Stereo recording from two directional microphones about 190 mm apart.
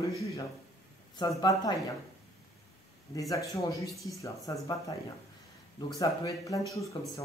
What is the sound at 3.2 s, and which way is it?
Speech, 15° left (ahead or behind).